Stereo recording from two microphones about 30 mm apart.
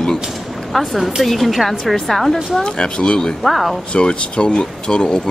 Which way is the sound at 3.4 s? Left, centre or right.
Centre.